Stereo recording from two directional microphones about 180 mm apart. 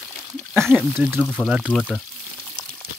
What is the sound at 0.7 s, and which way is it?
Speech, 5° right (ahead or behind).